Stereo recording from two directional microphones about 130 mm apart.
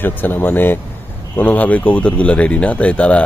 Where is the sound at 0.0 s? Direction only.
15° left (ahead or behind).